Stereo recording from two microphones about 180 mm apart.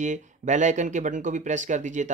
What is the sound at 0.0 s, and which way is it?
A man's voice, 45° right (ahead or behind).